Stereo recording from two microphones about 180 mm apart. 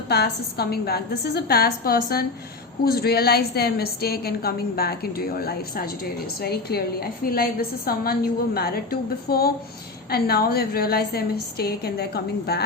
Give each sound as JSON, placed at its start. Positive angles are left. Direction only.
{"t": 0.1, "sound": "a woman's voice", "side_deg": 65}